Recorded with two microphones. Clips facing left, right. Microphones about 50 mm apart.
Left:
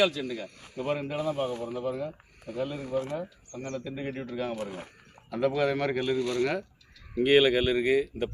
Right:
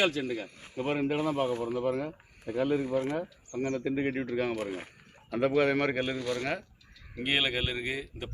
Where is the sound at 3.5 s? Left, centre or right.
Right.